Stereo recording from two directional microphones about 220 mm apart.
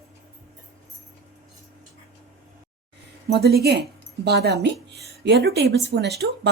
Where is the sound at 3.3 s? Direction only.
45° right (ahead or behind).